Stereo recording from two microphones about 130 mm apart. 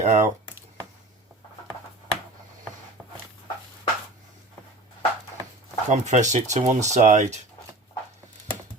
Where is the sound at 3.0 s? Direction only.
10° right (ahead or behind).